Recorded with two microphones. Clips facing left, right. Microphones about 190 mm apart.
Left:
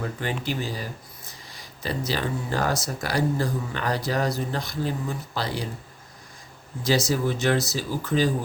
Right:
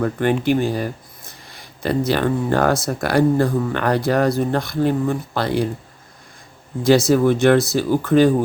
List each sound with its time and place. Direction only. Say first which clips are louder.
0.0 s speech: right 11 dB; 60° right (ahead or behind)
7.1 s speech: right 10 dB; 60° right (ahead or behind)